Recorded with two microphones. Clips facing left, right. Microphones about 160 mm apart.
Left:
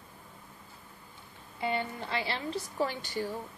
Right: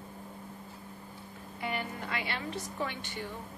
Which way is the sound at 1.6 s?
25° left (ahead or behind).